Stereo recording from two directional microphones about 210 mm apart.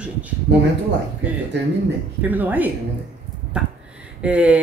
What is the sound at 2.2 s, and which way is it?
Speech, 10° right (ahead or behind).